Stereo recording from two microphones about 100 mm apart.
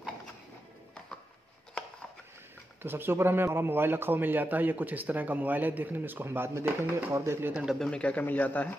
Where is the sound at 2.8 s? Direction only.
20° right (ahead or behind).